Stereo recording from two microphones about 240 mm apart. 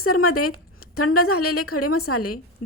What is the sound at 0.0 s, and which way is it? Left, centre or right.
A woman's voice, left.